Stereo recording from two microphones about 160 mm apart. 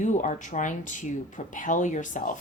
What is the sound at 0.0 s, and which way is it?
Speech, 50° left (ahead or behind).